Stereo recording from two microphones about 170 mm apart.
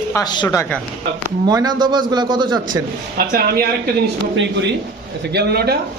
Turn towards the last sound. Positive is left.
turn(degrees=-70)  # may be behind; listen again after turning